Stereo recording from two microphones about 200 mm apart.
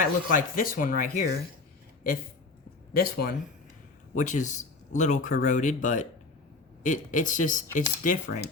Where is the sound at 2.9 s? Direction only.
50° left (ahead or behind).